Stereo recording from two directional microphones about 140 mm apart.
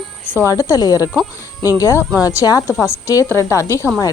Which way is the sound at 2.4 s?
25° left (ahead or behind).